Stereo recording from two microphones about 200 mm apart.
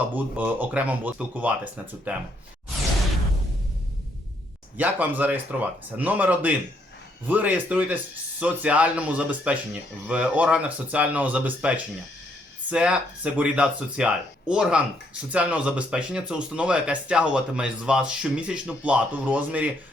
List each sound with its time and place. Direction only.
0.1 s speech: 10° right (ahead or behind)
4.8 s speech: 10° right (ahead or behind)
12.7 s speech: 5° right (ahead or behind)